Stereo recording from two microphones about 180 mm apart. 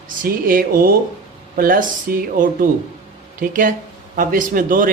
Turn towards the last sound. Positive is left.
turn(degrees=-50)  # may be behind; listen again after turning